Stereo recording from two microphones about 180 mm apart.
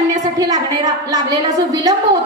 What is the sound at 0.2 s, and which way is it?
A woman's voice, 20° right (ahead or behind).